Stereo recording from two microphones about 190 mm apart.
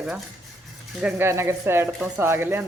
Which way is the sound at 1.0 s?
10° right (ahead or behind).